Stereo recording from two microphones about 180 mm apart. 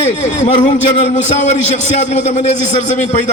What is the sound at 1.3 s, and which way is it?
A man's voice, 40° left (ahead or behind).